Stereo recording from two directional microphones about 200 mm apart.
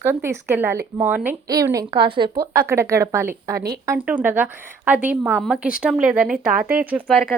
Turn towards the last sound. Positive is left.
turn(degrees=0)  # may be behind; listen again after turning